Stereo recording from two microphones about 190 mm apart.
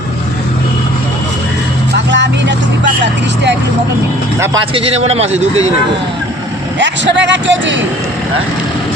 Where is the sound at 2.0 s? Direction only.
70° right (ahead or behind).